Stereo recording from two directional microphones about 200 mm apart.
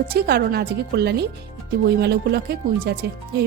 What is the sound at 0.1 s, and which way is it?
Speech, 50° right (ahead or behind).